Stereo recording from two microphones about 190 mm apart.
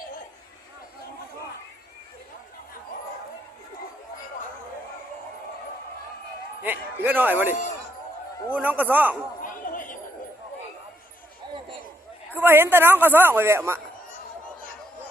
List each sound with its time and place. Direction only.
6.6 s a man's voice: 10° right (ahead or behind)
8.5 s a man's voice: 10° right (ahead or behind)
9.4 s a sound: 45° left (ahead or behind)
12.3 s a man's voice: 10° right (ahead or behind)